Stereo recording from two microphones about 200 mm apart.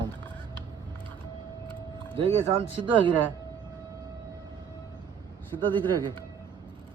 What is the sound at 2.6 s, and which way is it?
Speech, 25° right (ahead or behind).